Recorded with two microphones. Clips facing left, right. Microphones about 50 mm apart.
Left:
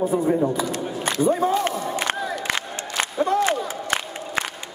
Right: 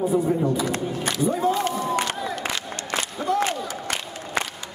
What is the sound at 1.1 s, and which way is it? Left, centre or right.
Crowd, left.